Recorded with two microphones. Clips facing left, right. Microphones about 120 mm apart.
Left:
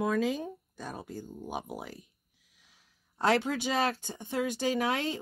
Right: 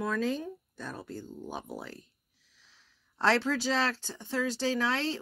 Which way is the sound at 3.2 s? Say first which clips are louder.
Even; 15° left (ahead or behind).